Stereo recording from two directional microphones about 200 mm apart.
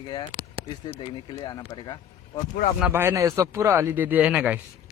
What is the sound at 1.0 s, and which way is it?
Speech, 25° left (ahead or behind).